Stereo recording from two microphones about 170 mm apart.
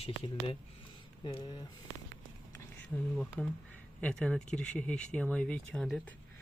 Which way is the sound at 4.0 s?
5° left (ahead or behind).